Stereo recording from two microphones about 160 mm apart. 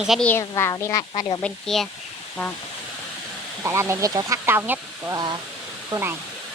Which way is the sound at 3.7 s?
15° right (ahead or behind).